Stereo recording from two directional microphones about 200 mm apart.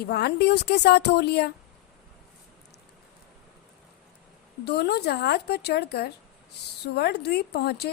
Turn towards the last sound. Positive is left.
turn(degrees=55)  # may be behind; listen again after turning